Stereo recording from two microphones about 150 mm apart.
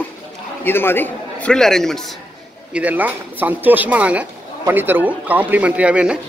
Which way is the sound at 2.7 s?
10° right (ahead or behind).